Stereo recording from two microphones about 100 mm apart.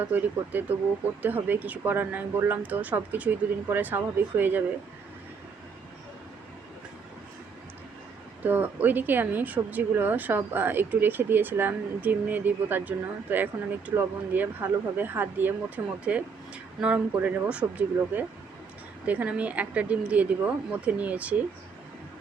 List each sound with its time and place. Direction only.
0.0 s speech: 15° right (ahead or behind)
8.4 s speech: 20° right (ahead or behind)